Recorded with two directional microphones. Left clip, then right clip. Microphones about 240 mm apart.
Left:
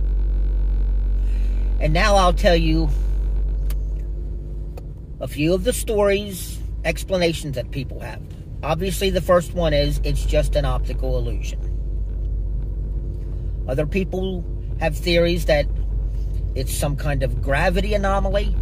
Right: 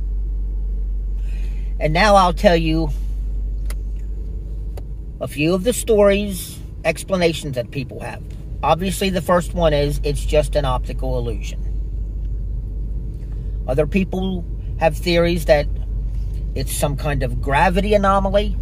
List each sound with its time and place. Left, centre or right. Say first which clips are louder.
1.8 s speech: right 4 dB; right
5.2 s speech: right 2 dB; right
13.7 s speech: right 4 dB; right